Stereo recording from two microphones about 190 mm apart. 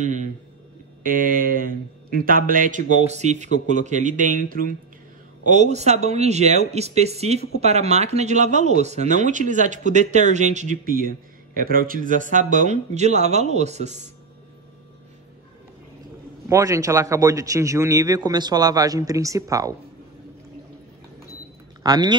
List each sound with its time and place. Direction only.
0.0 s a man's voice: 40° right (ahead or behind)
16.4 s a man's voice: 15° right (ahead or behind)
21.8 s speech: 20° right (ahead or behind)